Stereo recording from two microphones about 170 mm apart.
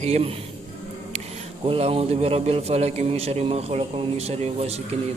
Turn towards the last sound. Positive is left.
turn(degrees=-40)  # may be behind; listen again after turning